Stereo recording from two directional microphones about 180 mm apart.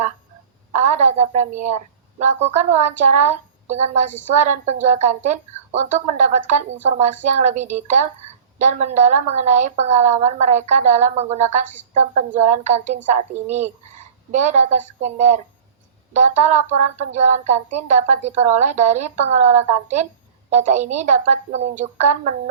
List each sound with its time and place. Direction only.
0.7 s a woman's voice: 45° right (ahead or behind)